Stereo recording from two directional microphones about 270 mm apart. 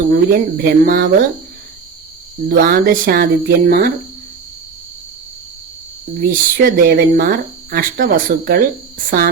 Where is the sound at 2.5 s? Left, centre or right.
Right.